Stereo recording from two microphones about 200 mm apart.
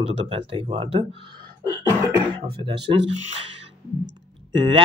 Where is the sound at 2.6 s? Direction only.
25° right (ahead or behind).